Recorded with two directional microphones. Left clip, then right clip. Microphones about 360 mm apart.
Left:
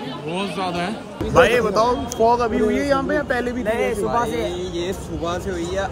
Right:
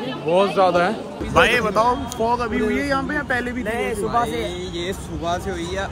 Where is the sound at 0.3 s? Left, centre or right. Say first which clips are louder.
Right 10 dB; centre.